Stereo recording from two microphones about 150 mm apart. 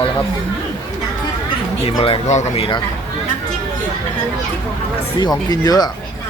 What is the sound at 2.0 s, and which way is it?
Speech, 40° left (ahead or behind).